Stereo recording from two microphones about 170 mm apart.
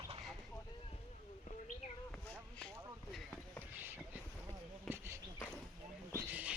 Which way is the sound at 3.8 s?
10° right (ahead or behind).